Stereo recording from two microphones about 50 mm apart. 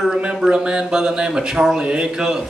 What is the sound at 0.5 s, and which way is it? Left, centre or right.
Speech, centre.